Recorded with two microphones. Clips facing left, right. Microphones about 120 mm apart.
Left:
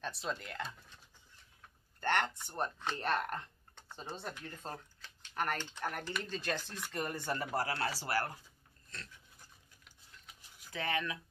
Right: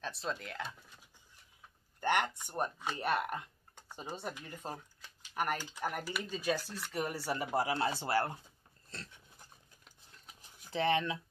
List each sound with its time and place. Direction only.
0.0 s speech: centre (ahead or behind); by 8.4 s 25° right (ahead or behind)
10.6 s speech: 30° right (ahead or behind)